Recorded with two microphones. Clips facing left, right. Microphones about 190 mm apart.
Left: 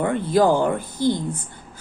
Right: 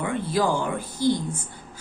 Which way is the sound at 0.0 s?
50° left (ahead or behind).